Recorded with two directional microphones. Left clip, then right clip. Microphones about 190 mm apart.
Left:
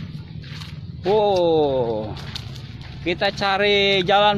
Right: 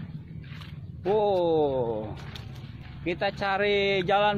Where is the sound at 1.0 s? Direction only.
5° left (ahead or behind).